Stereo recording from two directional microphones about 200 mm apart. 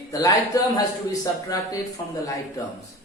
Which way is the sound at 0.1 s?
15° left (ahead or behind).